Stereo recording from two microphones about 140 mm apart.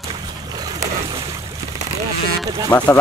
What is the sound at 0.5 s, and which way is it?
Boat, 30° right (ahead or behind).